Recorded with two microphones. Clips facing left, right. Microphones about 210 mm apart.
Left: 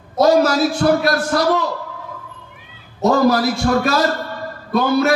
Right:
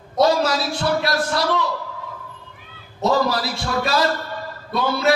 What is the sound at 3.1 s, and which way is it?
Speech, 50° left (ahead or behind).